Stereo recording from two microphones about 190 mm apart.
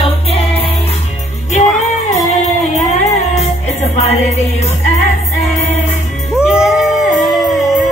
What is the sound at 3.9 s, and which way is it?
Music, 35° left (ahead or behind).